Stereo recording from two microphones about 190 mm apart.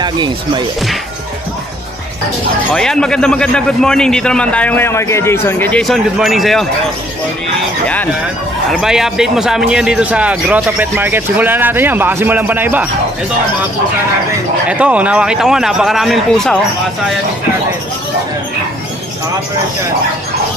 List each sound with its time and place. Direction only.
0.0 s speech: 25° right (ahead or behind)
2.7 s a man's voice: 5° left (ahead or behind)
7.8 s speech: 10° left (ahead or behind)
8.7 s speech: centre (ahead or behind)
14.7 s a man's voice: 5° right (ahead or behind)